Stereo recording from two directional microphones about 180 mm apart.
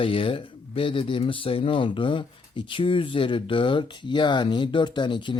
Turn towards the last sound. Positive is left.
turn(degrees=25)  # may be behind; listen again after turning